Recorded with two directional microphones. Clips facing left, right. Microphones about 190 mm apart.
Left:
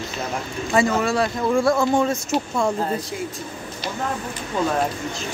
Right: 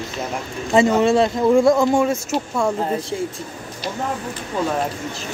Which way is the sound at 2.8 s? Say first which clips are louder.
Right 2 dB; 20° right (ahead or behind).